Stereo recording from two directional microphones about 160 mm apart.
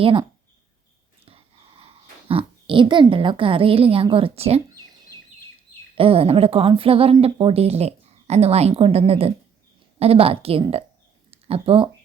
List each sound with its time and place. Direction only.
0.0 s a woman's voice: 35° right (ahead or behind)
1.8 s speech: 35° right (ahead or behind)
6.0 s a woman's voice: 35° right (ahead or behind)